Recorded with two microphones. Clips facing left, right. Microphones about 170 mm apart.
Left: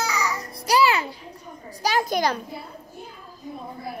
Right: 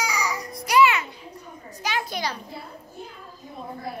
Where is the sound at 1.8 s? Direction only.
40° left (ahead or behind).